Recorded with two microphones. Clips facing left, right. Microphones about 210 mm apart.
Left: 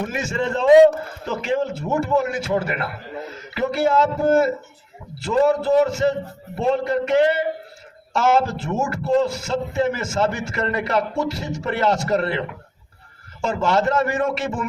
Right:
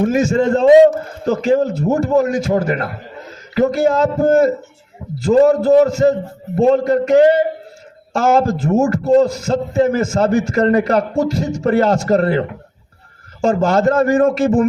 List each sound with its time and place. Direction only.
0.1 s a man's voice: 40° right (ahead or behind)